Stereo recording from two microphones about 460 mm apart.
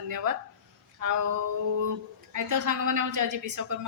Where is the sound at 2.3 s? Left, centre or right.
Right.